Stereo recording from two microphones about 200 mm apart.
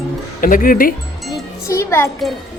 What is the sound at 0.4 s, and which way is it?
Speech, 45° left (ahead or behind).